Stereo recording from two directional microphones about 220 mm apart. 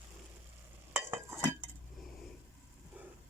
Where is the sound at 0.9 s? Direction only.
10° right (ahead or behind).